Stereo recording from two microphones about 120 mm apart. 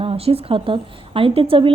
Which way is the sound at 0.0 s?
55° right (ahead or behind).